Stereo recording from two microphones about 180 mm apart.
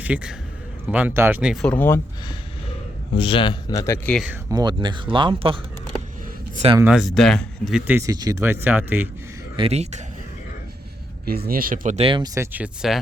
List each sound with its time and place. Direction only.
0.0 s a man's voice: 5° right (ahead or behind)
1.7 s speech: 10° left (ahead or behind)
3.2 s a man's voice: 30° left (ahead or behind)
4.1 s speech: 5° right (ahead or behind)
4.4 s speech: 20° right (ahead or behind)
6.7 s speech: 5° right (ahead or behind)
9.6 s speech: 35° right (ahead or behind)
11.3 s speech: 55° right (ahead or behind)
11.9 s speech: 30° right (ahead or behind); by 13.0 s 5° right (ahead or behind)